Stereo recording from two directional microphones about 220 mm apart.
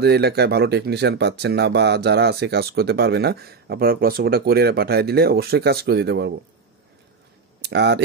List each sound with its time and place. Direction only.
0.0 s speech: 45° right (ahead or behind)
7.6 s speech: 50° right (ahead or behind)